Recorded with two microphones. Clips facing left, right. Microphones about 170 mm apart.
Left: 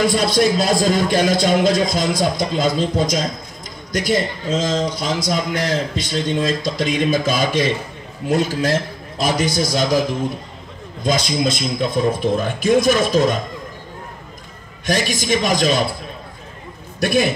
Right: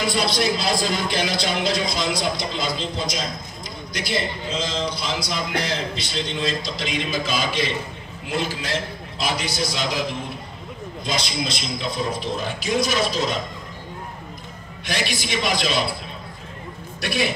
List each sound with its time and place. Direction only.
0.0 s a man's voice: 45° left (ahead or behind)
11.1 s a man's voice: 50° left (ahead or behind)
14.9 s a man's voice: 45° left (ahead or behind)
17.0 s a man's voice: 45° left (ahead or behind)